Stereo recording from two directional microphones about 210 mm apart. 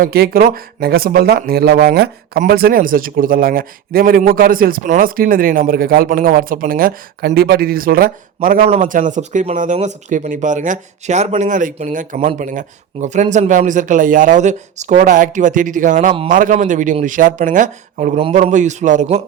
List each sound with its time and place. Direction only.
0.0 s speech: 45° right (ahead or behind)